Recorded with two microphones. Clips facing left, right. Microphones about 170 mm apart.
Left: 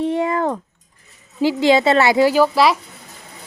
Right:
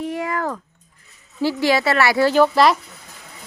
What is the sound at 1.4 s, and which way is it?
Speech, 15° left (ahead or behind).